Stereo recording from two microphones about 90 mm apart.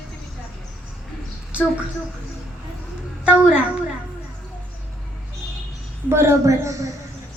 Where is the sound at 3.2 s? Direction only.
15° right (ahead or behind).